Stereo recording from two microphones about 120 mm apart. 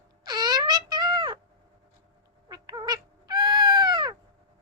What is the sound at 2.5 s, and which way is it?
Cat, 35° right (ahead or behind).